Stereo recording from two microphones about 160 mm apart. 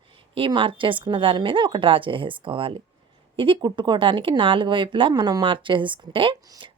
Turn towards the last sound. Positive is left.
turn(degrees=-30)  # may be behind; listen again after turning